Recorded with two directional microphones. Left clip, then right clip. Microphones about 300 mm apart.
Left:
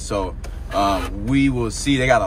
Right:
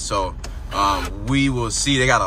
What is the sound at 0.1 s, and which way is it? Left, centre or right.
Speech, centre.